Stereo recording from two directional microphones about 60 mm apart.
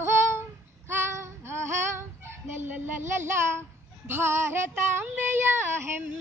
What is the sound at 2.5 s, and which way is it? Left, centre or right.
Speech, right.